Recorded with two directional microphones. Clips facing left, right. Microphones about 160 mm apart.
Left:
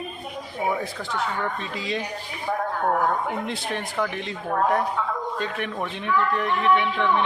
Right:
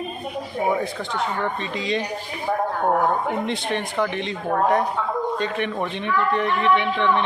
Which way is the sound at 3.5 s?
5° left (ahead or behind).